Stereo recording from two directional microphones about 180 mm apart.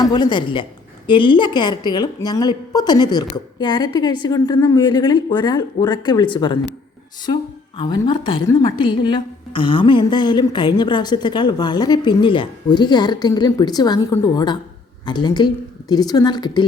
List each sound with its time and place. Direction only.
0.0 s a woman's voice: 25° left (ahead or behind)
7.8 s a woman's voice: 25° left (ahead or behind)